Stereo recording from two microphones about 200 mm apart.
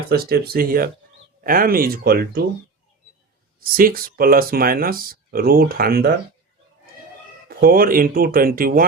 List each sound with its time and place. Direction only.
0.1 s speech: 50° right (ahead or behind)
3.6 s speech: 45° right (ahead or behind)
7.4 s speech: 45° right (ahead or behind)